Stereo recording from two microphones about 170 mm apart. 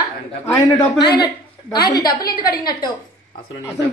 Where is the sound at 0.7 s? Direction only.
25° left (ahead or behind).